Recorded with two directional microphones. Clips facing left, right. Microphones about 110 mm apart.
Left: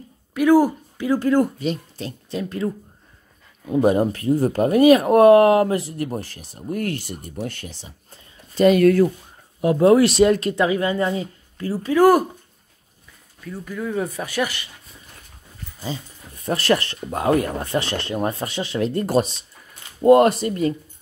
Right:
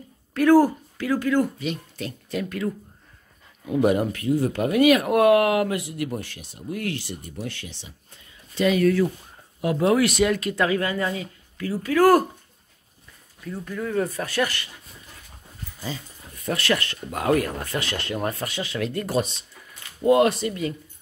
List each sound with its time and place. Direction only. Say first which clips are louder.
0.3 s speech: left 1 dB; 15° left (ahead or behind)
1.2 s speech: left 5 dB; 40° left (ahead or behind)
3.7 s speech: left 3 dB; 30° left (ahead or behind); by 9.0 s 55° left (ahead or behind)
9.6 s speech: left 6 dB; 30° left (ahead or behind)
10.5 s speech: left 3 dB; 20° left (ahead or behind)
13.4 s speech: left 1 dB; centre (ahead or behind)
15.8 s speech: left 3 dB; 30° left (ahead or behind)